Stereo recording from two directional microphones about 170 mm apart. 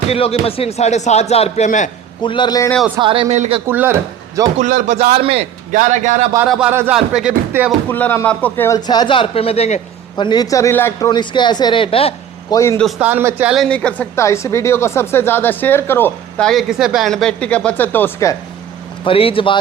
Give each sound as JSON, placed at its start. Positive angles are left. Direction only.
{"t": 0.1, "sound": "a man's voice", "side_deg": 35}
{"t": 2.2, "sound": "a man's voice", "side_deg": 30}
{"t": 3.0, "sound": "speech", "side_deg": -30}
{"t": 3.7, "sound": "speech", "side_deg": -10}
{"t": 4.5, "sound": "speech", "side_deg": -50}
{"t": 5.1, "sound": "speech", "side_deg": -35}
{"t": 5.7, "sound": "speech", "side_deg": -50}
{"t": 6.5, "sound": "speech", "side_deg": -5}
{"t": 7.9, "sound": "a man's voice", "side_deg": 10}
{"t": 10.2, "sound": "a man's voice", "side_deg": 25}
{"t": 11.1, "sound": "a man's voice", "side_deg": 25}
{"t": 12.5, "sound": "a man's voice", "side_deg": 20}
{"t": 13.0, "sound": "speech", "side_deg": -10}
{"t": 19.0, "sound": "a man's voice", "side_deg": 35}